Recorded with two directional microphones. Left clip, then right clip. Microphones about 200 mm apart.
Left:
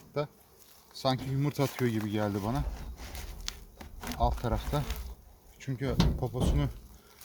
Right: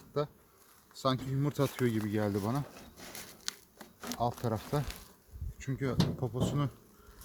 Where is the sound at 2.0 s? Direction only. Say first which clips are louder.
Left 1 dB; 10° left (ahead or behind).